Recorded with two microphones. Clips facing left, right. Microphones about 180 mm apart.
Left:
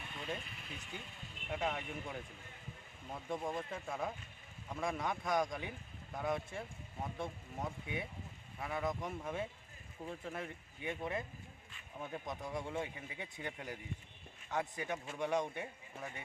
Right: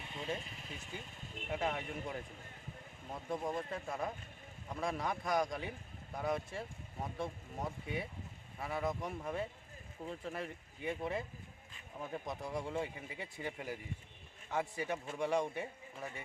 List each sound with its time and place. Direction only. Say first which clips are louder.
0.0 s a sound: right 2 dB; 25° right (ahead or behind)
0.3 s speech: right 2 dB; 35° right (ahead or behind)
1.5 s speech: right 1 dB; centre (ahead or behind)